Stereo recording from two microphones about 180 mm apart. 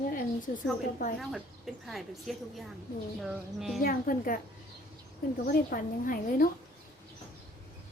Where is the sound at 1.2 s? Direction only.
Centre (ahead or behind).